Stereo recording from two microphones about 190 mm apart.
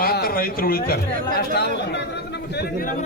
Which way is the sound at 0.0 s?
50° left (ahead or behind).